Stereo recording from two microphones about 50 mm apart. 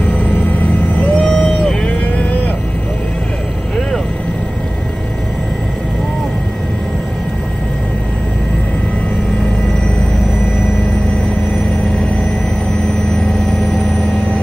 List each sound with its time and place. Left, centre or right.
0.0 s vehicle: left
13.1 s vehicle: centre